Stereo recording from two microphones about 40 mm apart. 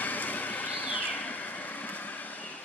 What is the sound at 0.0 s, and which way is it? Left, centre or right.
Vehicle, left.